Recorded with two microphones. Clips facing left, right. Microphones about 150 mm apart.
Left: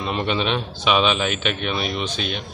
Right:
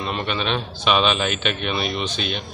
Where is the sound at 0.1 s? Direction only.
20° left (ahead or behind).